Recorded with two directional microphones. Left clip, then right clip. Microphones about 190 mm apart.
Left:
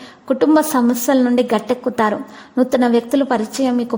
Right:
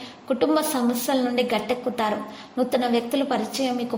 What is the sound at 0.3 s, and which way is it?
A woman's voice, 50° left (ahead or behind).